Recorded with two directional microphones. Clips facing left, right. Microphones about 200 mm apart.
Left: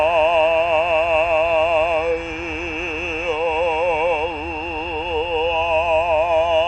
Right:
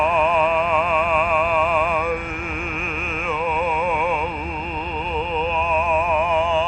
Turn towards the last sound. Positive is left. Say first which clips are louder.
# left 4 dB
turn(degrees=25)  # may be behind; listen again after turning